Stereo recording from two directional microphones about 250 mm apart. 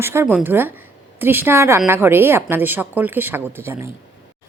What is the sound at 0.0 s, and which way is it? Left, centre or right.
A woman's voice, centre.